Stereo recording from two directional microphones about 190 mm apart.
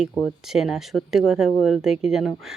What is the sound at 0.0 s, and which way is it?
Speech, centre (ahead or behind).